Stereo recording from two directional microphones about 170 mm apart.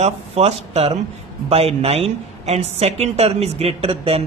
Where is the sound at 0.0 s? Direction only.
40° right (ahead or behind).